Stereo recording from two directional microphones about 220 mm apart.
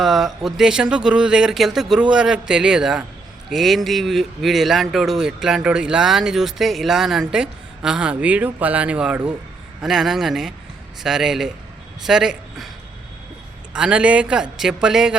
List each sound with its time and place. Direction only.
0.0 s speech: centre (ahead or behind)
13.7 s speech: 5° right (ahead or behind)